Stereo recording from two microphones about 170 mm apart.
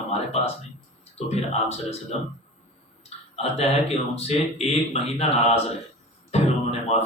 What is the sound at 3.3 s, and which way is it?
Speech, 35° left (ahead or behind).